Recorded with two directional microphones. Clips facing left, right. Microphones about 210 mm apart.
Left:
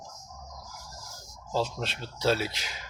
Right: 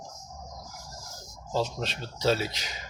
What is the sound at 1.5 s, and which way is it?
Speech, 5° left (ahead or behind).